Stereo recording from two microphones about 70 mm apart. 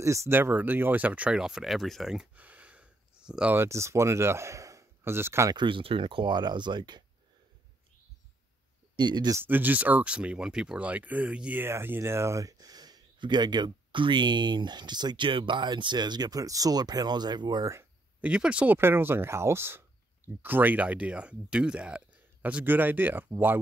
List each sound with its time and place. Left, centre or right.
0.0 s speech: right
0.3 s speech: right
1.4 s speech: centre
2.3 s a sound: right
3.5 s speech: right
5.0 s speech: right
6.2 s speech: right
8.9 s speech: right
9.4 s speech: right
18.2 s speech: centre
18.8 s speech: right